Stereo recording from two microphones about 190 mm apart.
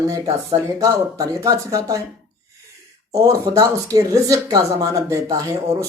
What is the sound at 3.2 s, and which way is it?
A woman's voice, 15° right (ahead or behind).